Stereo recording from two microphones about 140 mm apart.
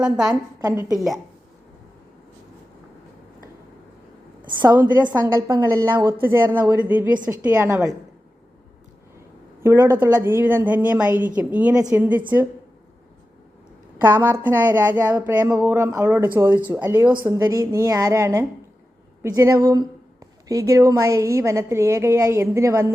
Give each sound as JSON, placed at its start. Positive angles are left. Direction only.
{"t": 0.3, "sound": "a woman's voice", "side_deg": -25}
{"t": 4.9, "sound": "a woman's voice", "side_deg": -30}
{"t": 9.6, "sound": "a woman's voice", "side_deg": -20}
{"t": 14.0, "sound": "a woman's voice", "side_deg": -15}